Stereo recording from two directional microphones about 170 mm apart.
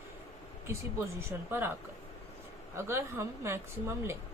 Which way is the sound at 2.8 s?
15° right (ahead or behind).